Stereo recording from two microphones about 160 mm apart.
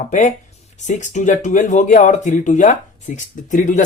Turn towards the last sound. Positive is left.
turn(degrees=50)  # may be behind; listen again after turning